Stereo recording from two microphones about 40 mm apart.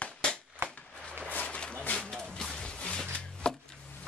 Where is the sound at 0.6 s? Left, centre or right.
Right.